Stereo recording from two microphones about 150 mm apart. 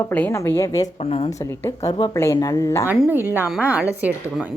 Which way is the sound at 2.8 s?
15° right (ahead or behind).